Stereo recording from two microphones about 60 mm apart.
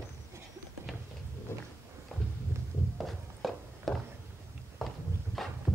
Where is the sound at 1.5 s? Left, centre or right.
Left.